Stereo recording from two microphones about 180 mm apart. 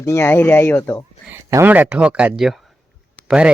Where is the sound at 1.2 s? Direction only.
15° right (ahead or behind).